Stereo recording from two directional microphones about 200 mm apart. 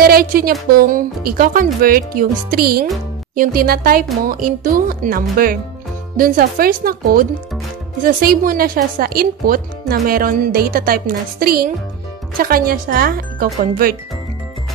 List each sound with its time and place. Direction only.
0.0 s a woman's voice: 50° right (ahead or behind)